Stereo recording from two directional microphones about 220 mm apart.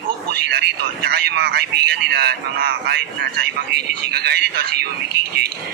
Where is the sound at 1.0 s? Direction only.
45° right (ahead or behind).